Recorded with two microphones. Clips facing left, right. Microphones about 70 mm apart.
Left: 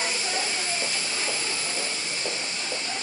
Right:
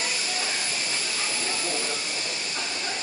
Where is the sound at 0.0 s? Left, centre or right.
Left.